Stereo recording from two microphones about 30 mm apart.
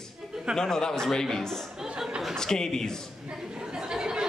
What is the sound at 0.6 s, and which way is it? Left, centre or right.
A man's voice, left.